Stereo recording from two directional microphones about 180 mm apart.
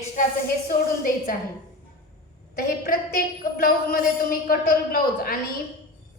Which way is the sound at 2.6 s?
55° left (ahead or behind).